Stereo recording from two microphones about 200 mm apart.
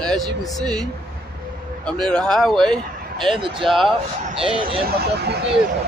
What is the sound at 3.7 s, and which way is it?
Speech, centre (ahead or behind).